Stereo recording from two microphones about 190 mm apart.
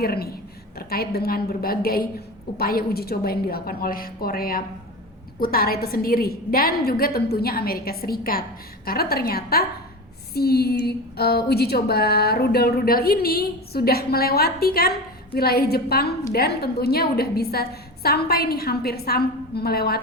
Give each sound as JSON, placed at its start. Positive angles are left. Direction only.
{"t": 0.0, "sound": "a woman's voice", "side_deg": 55}